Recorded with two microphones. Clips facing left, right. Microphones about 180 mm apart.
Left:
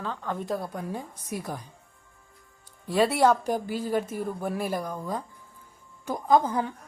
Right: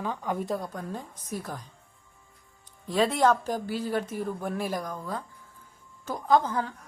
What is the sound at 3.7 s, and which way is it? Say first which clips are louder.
Speech: even; 50° left (ahead or behind).